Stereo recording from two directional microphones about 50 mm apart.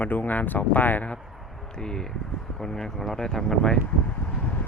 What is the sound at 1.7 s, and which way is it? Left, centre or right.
Speech, centre.